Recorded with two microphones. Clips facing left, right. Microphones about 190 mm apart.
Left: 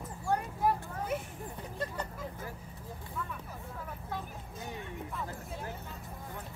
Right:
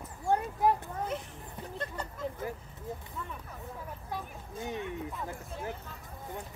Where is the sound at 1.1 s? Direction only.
10° left (ahead or behind).